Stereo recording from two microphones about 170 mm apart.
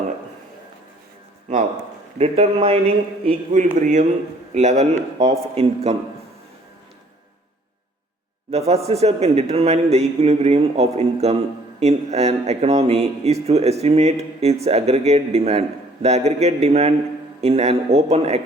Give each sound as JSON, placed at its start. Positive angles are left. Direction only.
{"t": 2.1, "sound": "speech", "side_deg": -35}
{"t": 3.8, "sound": "a man's voice", "side_deg": -50}
{"t": 8.4, "sound": "speech", "side_deg": -40}